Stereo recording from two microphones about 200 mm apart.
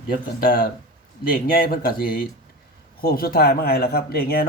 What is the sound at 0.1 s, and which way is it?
Speech, 50° left (ahead or behind).